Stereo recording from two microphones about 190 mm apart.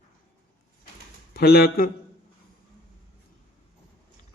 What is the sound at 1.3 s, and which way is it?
Speech, 55° left (ahead or behind).